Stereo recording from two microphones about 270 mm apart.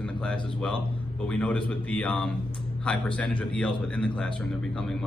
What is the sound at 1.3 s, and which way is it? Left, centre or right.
Speech, centre.